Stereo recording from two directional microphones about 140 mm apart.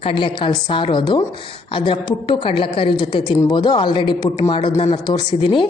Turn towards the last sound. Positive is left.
turn(degrees=35)  # may be behind; listen again after turning